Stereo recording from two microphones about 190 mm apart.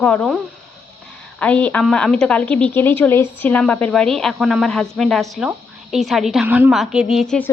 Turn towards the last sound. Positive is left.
turn(degrees=5)  # may be behind; listen again after turning